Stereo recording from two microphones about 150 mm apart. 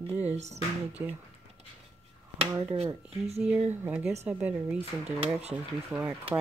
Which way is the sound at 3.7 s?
10° right (ahead or behind).